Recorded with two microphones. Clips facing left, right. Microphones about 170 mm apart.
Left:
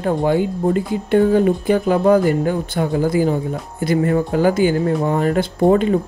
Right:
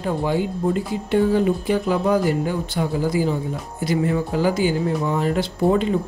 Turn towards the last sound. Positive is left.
turn(degrees=50)  # may be behind; listen again after turning